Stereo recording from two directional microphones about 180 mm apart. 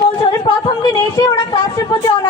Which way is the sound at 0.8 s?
25° left (ahead or behind).